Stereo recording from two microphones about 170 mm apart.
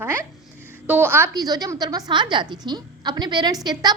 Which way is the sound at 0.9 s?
10° right (ahead or behind).